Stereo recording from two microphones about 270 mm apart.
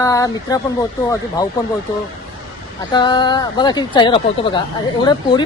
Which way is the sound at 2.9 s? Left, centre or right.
Centre.